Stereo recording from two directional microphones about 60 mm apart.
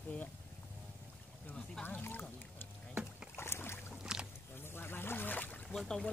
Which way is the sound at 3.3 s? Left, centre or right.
Left.